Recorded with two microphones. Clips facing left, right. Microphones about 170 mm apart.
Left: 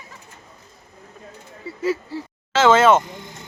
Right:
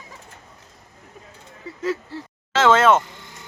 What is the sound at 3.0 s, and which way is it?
Speech, 20° left (ahead or behind).